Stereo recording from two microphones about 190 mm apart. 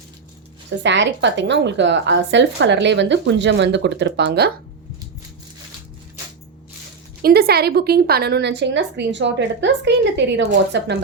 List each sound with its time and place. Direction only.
0.8 s speech: 70° right (ahead or behind)
7.2 s a woman's voice: 55° right (ahead or behind); by 10.9 s 70° right (ahead or behind)